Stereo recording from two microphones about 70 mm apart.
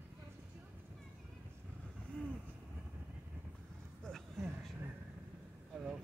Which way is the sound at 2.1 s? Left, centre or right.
Centre.